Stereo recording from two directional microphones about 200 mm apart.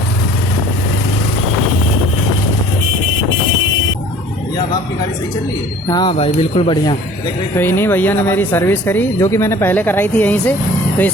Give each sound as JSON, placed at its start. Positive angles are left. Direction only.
{"t": 5.9, "sound": "speech", "side_deg": 20}
{"t": 7.5, "sound": "speech", "side_deg": 10}